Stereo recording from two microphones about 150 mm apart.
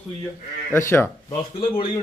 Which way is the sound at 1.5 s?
35° left (ahead or behind).